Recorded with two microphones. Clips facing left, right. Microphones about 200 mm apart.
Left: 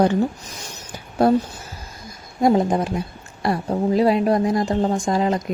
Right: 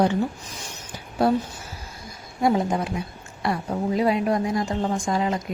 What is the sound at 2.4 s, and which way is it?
A woman's voice, 40° left (ahead or behind).